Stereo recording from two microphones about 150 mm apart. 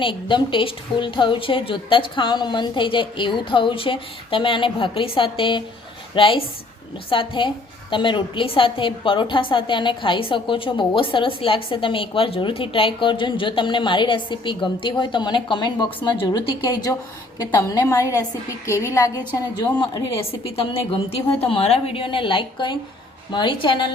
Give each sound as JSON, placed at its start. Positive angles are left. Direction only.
{"t": 0.0, "sound": "a woman's voice", "side_deg": 35}